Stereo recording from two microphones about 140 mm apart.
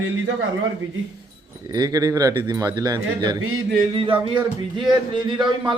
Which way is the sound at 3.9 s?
40° right (ahead or behind).